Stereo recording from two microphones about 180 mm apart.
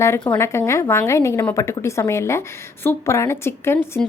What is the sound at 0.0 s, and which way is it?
A woman's voice, 15° left (ahead or behind).